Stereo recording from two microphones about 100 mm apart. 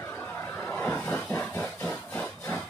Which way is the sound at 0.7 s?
15° left (ahead or behind).